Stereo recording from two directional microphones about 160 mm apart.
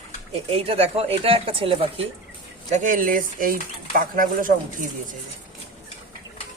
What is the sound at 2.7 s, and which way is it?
Speech, 55° right (ahead or behind).